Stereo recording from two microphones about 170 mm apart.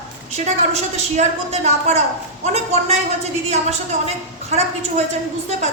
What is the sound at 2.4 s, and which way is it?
Speech, 40° right (ahead or behind).